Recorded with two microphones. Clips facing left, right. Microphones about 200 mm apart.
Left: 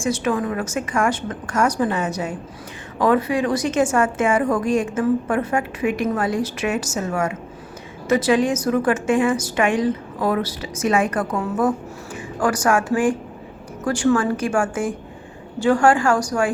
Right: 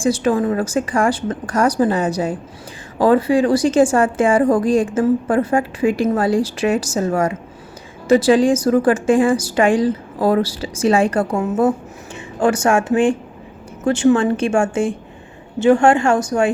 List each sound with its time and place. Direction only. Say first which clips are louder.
0.0 s a woman's voice: right 5 dB; 30° right (ahead or behind)